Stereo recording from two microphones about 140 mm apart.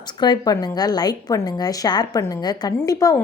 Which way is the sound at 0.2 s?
30° left (ahead or behind).